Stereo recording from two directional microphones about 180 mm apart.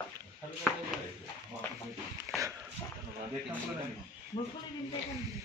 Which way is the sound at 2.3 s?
15° right (ahead or behind).